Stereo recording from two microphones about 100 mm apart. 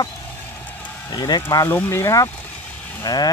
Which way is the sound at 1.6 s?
25° left (ahead or behind).